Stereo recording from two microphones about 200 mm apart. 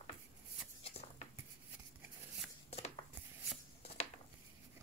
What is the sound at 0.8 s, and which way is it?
Dishes, 30° left (ahead or behind).